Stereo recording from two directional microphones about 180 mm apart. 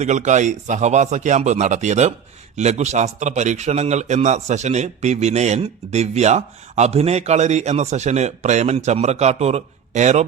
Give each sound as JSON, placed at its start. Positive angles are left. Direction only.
{"t": 0.0, "sound": "a man's voice", "side_deg": -40}